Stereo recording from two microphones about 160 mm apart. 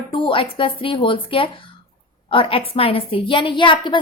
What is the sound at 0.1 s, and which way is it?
A woman's voice, 35° left (ahead or behind).